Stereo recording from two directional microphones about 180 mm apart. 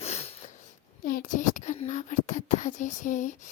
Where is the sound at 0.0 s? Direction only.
35° left (ahead or behind).